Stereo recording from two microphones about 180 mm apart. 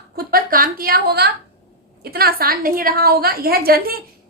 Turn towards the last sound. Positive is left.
turn(degrees=-55)  # may be behind; listen again after turning